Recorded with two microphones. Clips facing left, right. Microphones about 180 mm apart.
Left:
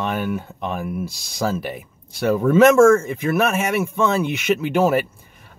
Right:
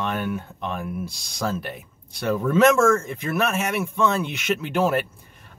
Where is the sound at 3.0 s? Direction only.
5° left (ahead or behind).